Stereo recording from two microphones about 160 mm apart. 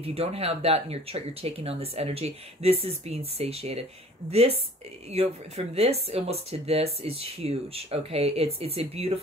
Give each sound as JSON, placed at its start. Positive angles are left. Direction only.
{"t": 0.0, "sound": "speech", "side_deg": -40}